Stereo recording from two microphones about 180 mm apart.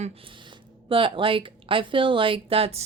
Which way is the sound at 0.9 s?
30° right (ahead or behind).